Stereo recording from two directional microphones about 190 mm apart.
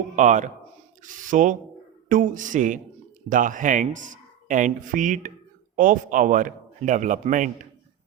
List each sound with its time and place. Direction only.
0.2 s a man's voice: 40° right (ahead or behind)